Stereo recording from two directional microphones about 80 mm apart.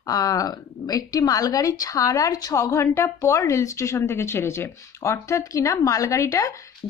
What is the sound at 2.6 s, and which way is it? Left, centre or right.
A woman's voice, left.